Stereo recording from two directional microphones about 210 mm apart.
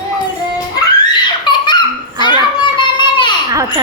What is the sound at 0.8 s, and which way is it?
Laughter, 20° left (ahead or behind).